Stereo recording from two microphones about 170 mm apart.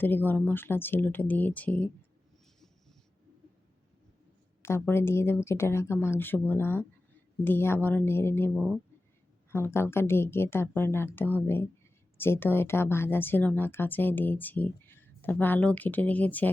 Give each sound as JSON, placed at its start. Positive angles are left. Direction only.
{"t": 0.0, "sound": "a woman's voice", "side_deg": 10}
{"t": 4.6, "sound": "a woman's voice", "side_deg": 15}